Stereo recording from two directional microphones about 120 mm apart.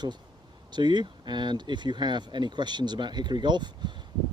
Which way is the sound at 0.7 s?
40° right (ahead or behind).